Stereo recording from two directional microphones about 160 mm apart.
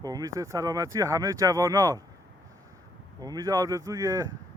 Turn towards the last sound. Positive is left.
turn(degrees=-20)  # may be behind; listen again after turning